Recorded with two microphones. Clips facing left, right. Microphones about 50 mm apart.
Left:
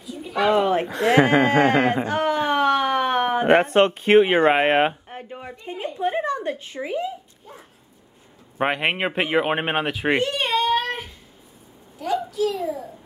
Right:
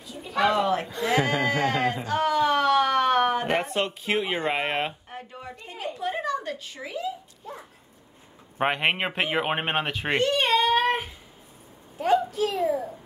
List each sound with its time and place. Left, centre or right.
0.0 s a sound: centre
0.8 s speech: left
1.1 s a sound: left; by 3.4 s centre
3.4 s speech: left
5.1 s speech: left
8.5 s speech: centre
12.0 s a child's voice: right